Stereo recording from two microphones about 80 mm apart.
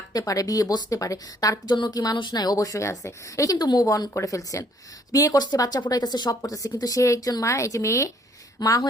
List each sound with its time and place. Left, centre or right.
0.1 s a woman's voice: left
2.6 s a woman's voice: left
4.1 s a woman's voice: left